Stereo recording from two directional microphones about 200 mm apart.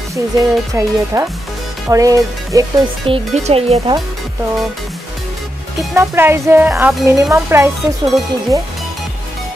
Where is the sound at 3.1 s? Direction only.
30° right (ahead or behind).